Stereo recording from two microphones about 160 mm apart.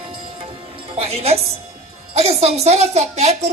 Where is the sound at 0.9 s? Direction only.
40° right (ahead or behind).